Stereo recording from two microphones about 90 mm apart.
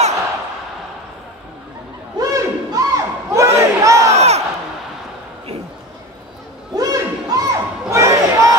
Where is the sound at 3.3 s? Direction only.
35° right (ahead or behind).